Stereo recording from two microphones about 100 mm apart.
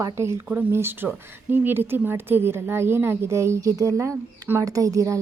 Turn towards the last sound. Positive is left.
turn(degrees=-30)  # may be behind; listen again after turning